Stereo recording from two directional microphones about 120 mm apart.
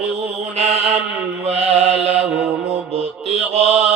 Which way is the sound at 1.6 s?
60° right (ahead or behind).